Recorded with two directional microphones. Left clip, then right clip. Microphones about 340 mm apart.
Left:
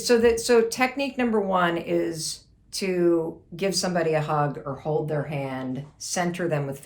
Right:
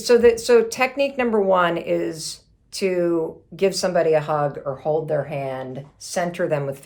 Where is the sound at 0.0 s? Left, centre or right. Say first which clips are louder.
Right 5 dB; centre.